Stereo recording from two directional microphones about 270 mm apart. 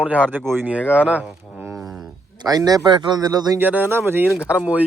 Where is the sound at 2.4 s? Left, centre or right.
Centre.